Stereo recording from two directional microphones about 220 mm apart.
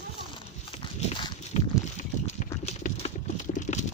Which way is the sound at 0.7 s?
25° left (ahead or behind).